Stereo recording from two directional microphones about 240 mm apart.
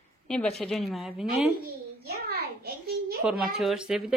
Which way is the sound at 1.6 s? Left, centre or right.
Right.